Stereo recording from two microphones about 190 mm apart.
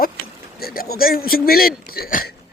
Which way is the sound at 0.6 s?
50° left (ahead or behind).